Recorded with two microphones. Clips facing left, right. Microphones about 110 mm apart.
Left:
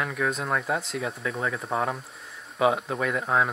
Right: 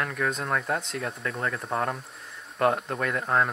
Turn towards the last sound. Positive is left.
turn(degrees=0)  # may be behind; listen again after turning